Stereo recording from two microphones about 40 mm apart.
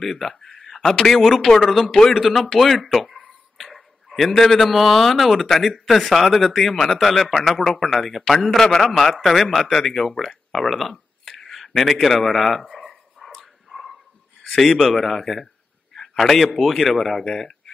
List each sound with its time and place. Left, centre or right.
0.0 s speech: centre
1.9 s speech: centre
2.1 s speech: centre
3.5 s a sound: centre
4.3 s speech: centre
6.1 s speech: centre
13.2 s dog: centre
13.7 s dog: centre
14.6 s speech: centre